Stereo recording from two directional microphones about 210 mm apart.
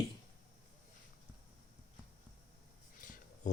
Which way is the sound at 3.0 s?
40° left (ahead or behind).